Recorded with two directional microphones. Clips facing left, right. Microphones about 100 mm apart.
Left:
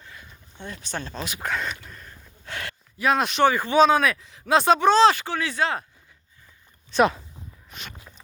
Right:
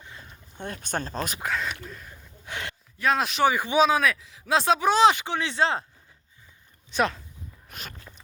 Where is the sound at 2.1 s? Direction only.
15° right (ahead or behind).